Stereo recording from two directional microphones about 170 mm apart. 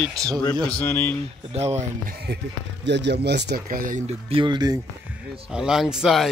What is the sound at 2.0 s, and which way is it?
Speech, 70° right (ahead or behind).